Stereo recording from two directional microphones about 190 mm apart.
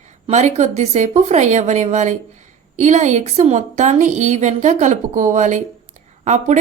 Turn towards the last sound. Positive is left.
turn(degrees=-35)  # may be behind; listen again after turning